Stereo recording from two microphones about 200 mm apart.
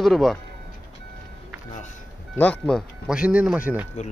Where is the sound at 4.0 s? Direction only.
35° left (ahead or behind).